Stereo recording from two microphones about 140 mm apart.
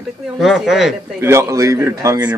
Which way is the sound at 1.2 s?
20° right (ahead or behind).